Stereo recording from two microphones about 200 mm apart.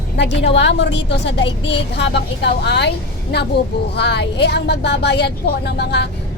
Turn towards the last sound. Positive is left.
turn(degrees=55)  # may be behind; listen again after turning